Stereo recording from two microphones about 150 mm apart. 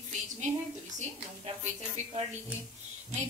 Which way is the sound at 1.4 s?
45° right (ahead or behind).